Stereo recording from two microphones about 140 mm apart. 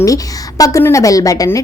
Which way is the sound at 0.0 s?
25° left (ahead or behind).